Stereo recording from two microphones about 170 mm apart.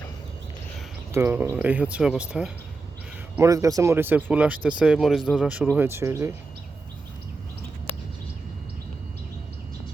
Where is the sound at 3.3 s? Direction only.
20° right (ahead or behind).